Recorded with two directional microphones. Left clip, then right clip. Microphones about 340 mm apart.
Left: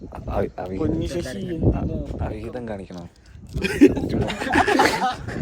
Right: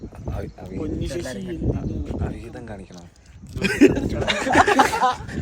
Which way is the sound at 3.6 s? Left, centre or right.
Centre.